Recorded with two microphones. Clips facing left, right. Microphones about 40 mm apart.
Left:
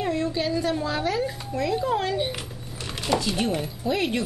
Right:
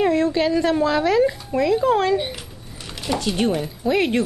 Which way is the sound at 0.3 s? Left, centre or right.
Right.